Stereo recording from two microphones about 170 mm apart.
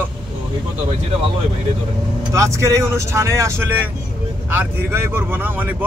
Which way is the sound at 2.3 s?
20° right (ahead or behind).